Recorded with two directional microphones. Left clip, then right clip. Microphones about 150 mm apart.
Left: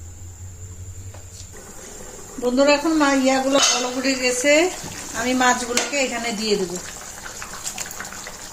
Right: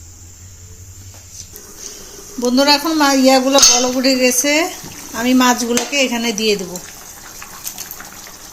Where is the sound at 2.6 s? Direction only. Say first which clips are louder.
Right 3 dB; 65° right (ahead or behind).